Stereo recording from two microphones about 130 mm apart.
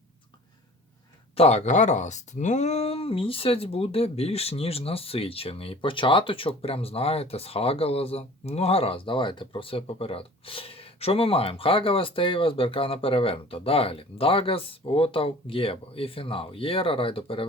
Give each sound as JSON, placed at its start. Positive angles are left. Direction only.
{"t": 1.4, "sound": "speech", "side_deg": 55}